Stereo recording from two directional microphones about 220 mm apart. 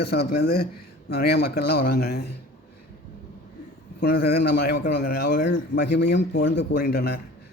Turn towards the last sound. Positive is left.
turn(degrees=50)  # may be behind; listen again after turning